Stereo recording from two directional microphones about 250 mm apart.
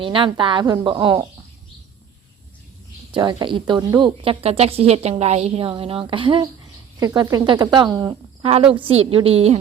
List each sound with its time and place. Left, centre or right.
0.0 s a woman's voice: right
3.1 s a woman's voice: centre